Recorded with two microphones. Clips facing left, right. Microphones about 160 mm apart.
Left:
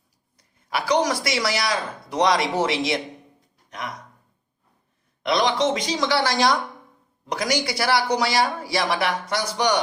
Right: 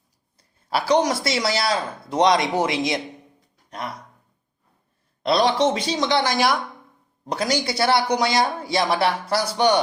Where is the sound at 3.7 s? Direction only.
30° right (ahead or behind).